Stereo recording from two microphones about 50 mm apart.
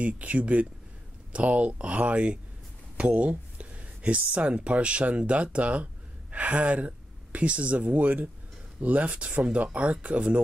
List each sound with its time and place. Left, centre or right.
0.0 s speech: right